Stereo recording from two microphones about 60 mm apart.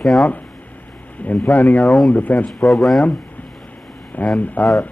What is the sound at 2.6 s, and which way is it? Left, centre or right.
Speech, centre.